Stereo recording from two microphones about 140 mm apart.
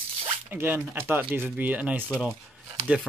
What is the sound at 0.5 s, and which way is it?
Speech, 15° right (ahead or behind).